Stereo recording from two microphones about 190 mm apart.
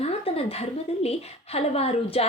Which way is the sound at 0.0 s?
30° left (ahead or behind).